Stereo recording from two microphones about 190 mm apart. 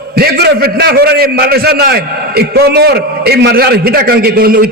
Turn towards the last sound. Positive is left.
turn(degrees=-50)  # may be behind; listen again after turning